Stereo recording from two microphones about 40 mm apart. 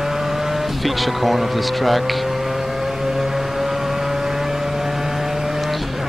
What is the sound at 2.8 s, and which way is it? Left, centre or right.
Vehicle, centre.